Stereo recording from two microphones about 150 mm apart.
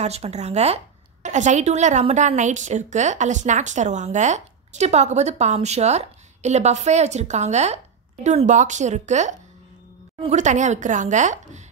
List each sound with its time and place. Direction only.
0.0 s a woman's voice: 45° right (ahead or behind)